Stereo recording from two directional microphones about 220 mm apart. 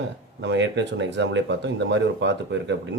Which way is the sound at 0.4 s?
55° right (ahead or behind).